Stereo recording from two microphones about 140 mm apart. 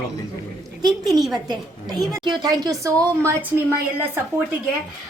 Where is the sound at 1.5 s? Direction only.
30° right (ahead or behind).